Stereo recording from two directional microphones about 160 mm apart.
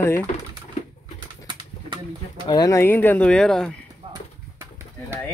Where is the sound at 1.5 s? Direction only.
30° right (ahead or behind).